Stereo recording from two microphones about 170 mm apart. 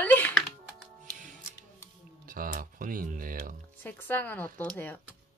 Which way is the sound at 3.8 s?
10° left (ahead or behind).